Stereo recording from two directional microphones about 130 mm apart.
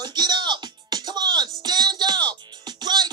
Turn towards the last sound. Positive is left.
turn(degrees=-35)  # may be behind; listen again after turning